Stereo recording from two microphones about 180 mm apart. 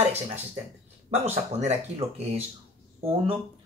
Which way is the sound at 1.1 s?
35° right (ahead or behind).